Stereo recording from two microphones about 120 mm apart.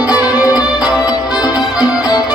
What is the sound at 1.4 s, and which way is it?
Music, 35° left (ahead or behind).